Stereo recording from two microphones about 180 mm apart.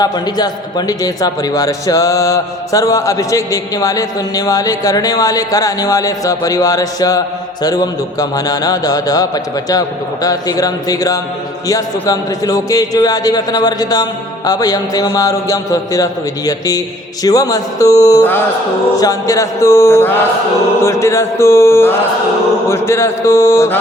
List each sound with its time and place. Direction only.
0.0 s a man's voice: 20° left (ahead or behind)
18.9 s mantra: 20° left (ahead or behind)